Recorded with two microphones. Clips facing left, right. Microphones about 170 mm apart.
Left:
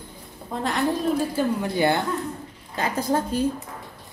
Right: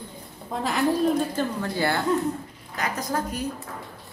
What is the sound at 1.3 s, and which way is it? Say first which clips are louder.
A woman's voice: left 3 dB; 15° left (ahead or behind).